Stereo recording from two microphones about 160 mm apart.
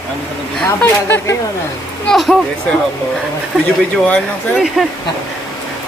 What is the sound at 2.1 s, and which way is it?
Speech, centre (ahead or behind).